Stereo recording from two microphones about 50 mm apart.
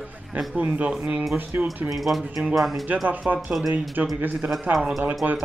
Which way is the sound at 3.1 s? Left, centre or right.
Right.